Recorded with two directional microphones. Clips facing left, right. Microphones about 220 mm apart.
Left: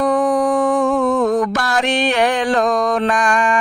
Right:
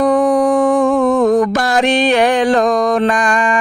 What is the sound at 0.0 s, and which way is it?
Music, 15° right (ahead or behind).